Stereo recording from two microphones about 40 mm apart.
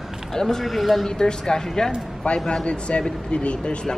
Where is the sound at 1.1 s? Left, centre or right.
Centre.